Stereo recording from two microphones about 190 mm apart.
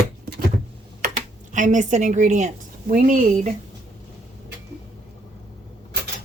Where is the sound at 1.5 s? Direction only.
40° right (ahead or behind).